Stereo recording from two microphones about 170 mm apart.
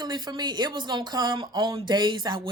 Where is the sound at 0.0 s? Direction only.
25° right (ahead or behind).